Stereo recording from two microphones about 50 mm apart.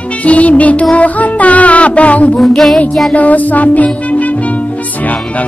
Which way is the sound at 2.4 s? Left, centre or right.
Centre.